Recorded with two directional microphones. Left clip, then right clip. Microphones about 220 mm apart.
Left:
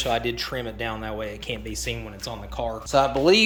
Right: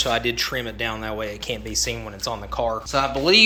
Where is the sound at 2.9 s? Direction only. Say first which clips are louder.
Left 1 dB; 25° left (ahead or behind).